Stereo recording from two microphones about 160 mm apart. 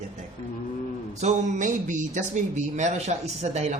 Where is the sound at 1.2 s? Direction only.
50° right (ahead or behind).